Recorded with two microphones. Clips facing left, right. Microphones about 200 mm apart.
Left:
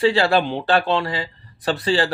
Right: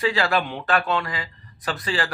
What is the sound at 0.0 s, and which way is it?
Speech, 30° left (ahead or behind).